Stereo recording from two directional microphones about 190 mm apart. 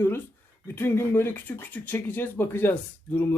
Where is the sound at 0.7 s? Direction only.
10° left (ahead or behind).